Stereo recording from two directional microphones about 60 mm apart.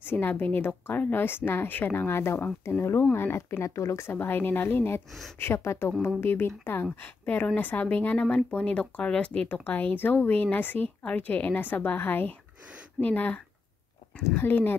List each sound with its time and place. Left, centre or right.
0.0 s a woman's voice: left
3.5 s speech: left
6.0 s a woman's voice: left; by 9.5 s centre
9.5 s a woman's voice: left